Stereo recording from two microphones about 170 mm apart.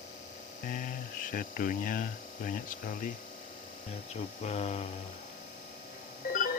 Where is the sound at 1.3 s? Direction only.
50° left (ahead or behind).